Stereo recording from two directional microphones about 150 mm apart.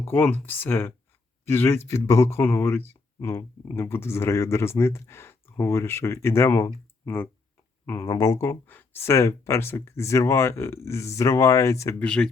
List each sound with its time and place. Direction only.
0.0 s speech: 15° left (ahead or behind)
12.0 s speech: 5° left (ahead or behind)